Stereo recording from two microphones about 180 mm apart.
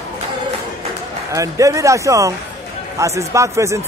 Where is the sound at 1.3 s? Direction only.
15° right (ahead or behind).